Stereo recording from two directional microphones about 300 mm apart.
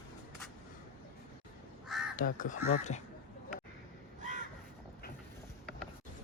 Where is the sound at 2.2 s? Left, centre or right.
Left.